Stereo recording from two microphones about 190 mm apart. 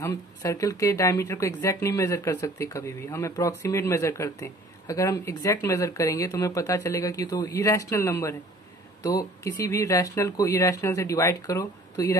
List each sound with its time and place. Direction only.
0.0 s speech: 15° left (ahead or behind)